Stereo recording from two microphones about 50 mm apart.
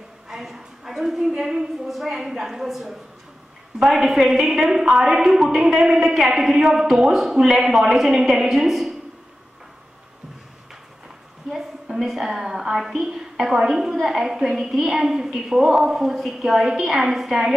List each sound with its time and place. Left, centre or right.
0.3 s a woman's voice: centre
11.5 s a woman's voice: centre